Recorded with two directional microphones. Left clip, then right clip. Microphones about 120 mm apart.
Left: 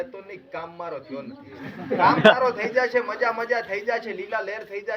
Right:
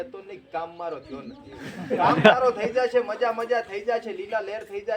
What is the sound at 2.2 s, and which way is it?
A man's voice, 25° right (ahead or behind).